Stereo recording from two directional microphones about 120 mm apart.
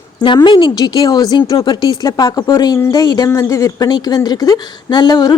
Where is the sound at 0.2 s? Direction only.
40° left (ahead or behind).